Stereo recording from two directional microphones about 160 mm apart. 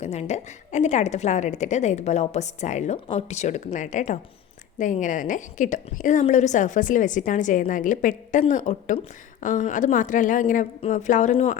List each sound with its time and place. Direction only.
0.0 s a woman's voice: 40° left (ahead or behind)